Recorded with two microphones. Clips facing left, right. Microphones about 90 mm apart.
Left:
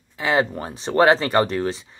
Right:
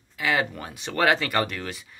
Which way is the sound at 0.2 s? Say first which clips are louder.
Left 5 dB; 30° left (ahead or behind).